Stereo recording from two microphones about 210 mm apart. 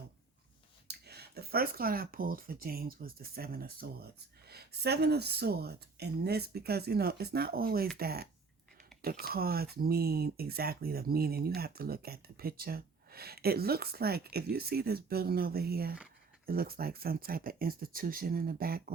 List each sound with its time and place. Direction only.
0.9 s speech: 50° right (ahead or behind)